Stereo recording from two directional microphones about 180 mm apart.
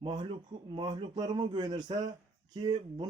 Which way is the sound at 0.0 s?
25° right (ahead or behind).